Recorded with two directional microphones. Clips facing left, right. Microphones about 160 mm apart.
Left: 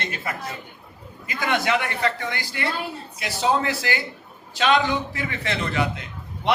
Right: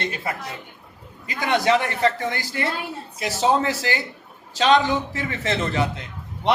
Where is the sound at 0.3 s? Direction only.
30° right (ahead or behind).